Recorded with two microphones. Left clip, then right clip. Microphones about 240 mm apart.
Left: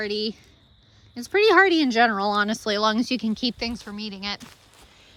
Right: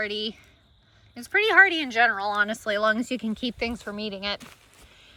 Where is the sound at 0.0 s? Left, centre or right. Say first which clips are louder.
Left 2 dB; centre.